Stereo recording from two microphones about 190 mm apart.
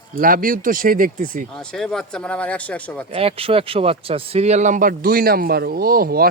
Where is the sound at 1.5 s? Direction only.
5° left (ahead or behind).